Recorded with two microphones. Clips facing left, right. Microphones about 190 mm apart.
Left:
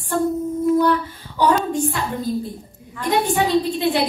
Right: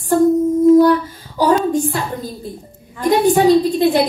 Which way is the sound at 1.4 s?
40° right (ahead or behind).